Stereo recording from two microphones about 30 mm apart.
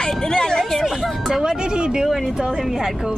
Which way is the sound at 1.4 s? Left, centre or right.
Right.